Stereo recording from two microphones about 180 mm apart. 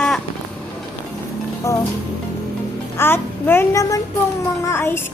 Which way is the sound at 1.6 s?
15° left (ahead or behind).